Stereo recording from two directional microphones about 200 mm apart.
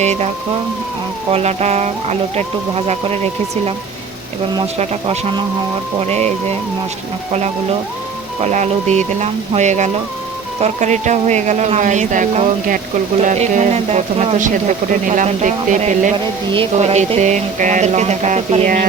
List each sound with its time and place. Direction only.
0.0 s speech: 35° right (ahead or behind)
1.3 s speech: 30° right (ahead or behind)
4.8 s speech: 35° right (ahead or behind)
7.3 s speech: 35° right (ahead or behind)